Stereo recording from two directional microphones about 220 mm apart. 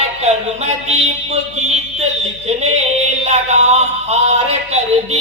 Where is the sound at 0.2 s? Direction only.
30° right (ahead or behind).